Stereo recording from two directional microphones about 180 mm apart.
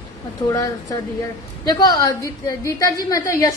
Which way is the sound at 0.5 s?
20° left (ahead or behind).